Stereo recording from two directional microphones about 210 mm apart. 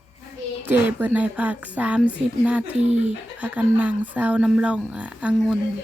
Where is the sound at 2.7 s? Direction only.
30° right (ahead or behind).